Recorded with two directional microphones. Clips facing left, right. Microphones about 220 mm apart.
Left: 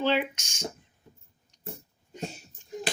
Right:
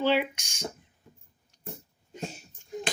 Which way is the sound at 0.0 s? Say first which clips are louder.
Right 1 dB; 10° right (ahead or behind).